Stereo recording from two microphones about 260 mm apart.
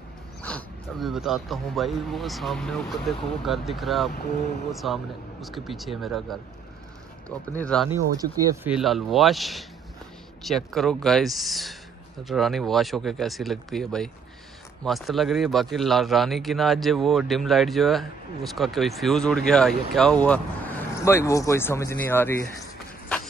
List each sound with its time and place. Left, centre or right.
0.4 s speech: centre
7.6 s speech: centre
22.6 s a sound: centre